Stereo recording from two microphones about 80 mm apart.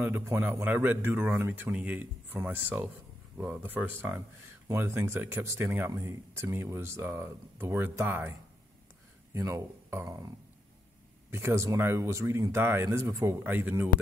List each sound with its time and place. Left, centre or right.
0.0 s speech: right
10.0 s a sound: right
11.2 s speech: right